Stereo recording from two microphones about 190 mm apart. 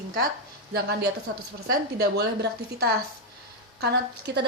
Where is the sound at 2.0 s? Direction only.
60° right (ahead or behind).